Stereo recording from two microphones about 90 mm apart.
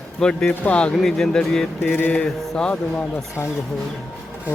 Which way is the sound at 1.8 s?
20° left (ahead or behind).